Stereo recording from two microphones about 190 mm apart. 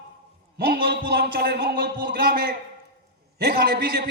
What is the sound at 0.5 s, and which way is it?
A man's voice, 55° right (ahead or behind).